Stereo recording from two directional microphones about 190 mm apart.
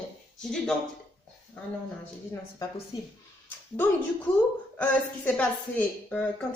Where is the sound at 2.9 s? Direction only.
20° left (ahead or behind).